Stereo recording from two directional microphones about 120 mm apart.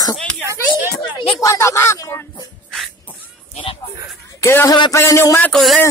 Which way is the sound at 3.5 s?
55° left (ahead or behind).